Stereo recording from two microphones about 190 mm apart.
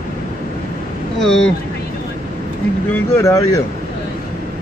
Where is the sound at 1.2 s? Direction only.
5° left (ahead or behind).